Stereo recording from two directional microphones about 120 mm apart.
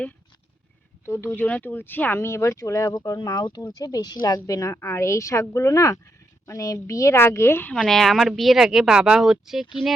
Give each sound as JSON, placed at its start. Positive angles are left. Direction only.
{"t": 1.0, "sound": "speech", "side_deg": 20}
{"t": 7.7, "sound": "speech", "side_deg": 5}